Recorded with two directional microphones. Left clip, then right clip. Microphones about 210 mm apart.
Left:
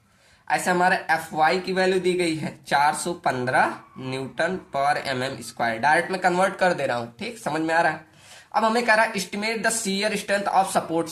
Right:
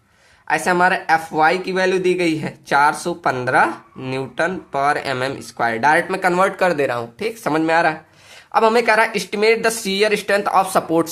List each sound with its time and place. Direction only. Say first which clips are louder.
0.4 s speech: right 5 dB; 35° right (ahead or behind)